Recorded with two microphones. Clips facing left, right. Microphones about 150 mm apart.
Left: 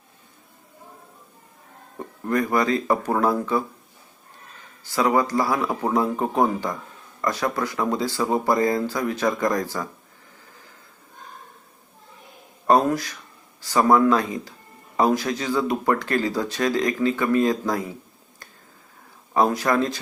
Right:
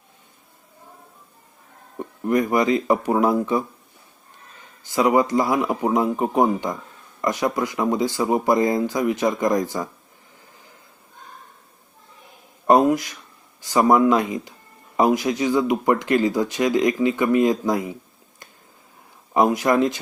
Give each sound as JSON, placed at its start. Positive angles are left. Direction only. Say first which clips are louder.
{"t": 2.2, "sound": "speech", "louder": "right 3 dB", "side_deg": -15}
{"t": 4.8, "sound": "speech", "louder": "right 3 dB", "side_deg": -20}
{"t": 12.6, "sound": "a sound", "louder": "right 3 dB", "side_deg": -20}
{"t": 13.6, "sound": "speech", "louder": "right 1 dB", "side_deg": -15}
{"t": 19.3, "sound": "speech", "louder": "right 2 dB", "side_deg": -20}